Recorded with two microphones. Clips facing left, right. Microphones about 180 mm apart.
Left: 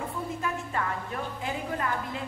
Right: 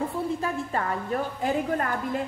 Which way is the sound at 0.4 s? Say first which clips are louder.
Right 3 dB; 40° right (ahead or behind).